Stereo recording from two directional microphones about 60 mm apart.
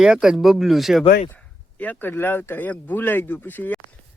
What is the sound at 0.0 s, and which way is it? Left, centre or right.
Speech, centre.